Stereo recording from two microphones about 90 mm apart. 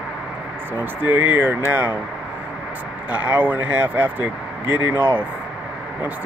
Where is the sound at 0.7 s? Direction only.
20° right (ahead or behind).